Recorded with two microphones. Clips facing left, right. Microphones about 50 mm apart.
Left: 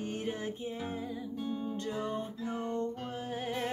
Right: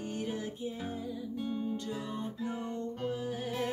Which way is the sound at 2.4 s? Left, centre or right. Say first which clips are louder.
Even; centre.